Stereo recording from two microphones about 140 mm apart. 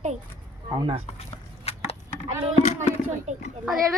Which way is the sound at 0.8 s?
40° right (ahead or behind).